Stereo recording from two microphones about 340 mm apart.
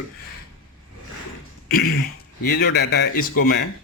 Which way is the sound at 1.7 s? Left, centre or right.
Left.